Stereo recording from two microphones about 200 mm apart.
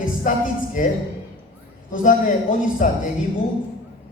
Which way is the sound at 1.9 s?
40° left (ahead or behind).